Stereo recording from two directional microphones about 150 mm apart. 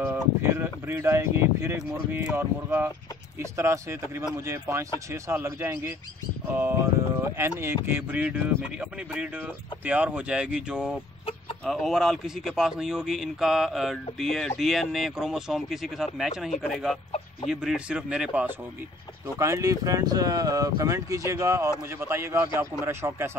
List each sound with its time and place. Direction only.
0.0 s speech: 15° right (ahead or behind)
9.8 s speech: 10° right (ahead or behind)
19.3 s speech: 20° right (ahead or behind)